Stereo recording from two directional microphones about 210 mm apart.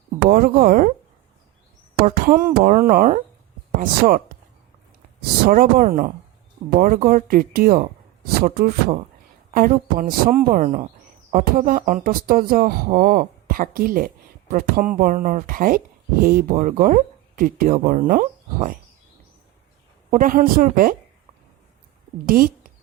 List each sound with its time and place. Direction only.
0.3 s speech: 40° right (ahead or behind)
2.0 s speech: 40° right (ahead or behind)
5.5 s speech: 40° right (ahead or behind)
20.1 s speech: 40° right (ahead or behind)
22.3 s speech: 45° right (ahead or behind)